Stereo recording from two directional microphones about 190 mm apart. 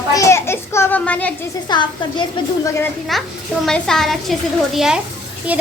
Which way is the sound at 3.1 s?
Centre (ahead or behind).